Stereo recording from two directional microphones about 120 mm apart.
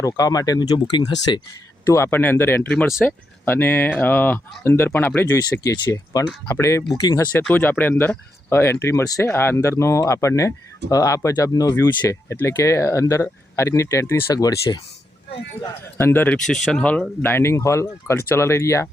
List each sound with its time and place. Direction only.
0.0 s speech: 30° left (ahead or behind)
1.9 s speech: 20° left (ahead or behind)
5.3 s speech: 30° left (ahead or behind)
7.3 s speech: 15° left (ahead or behind); by 14.8 s 30° left (ahead or behind)
15.6 s speech: 20° left (ahead or behind)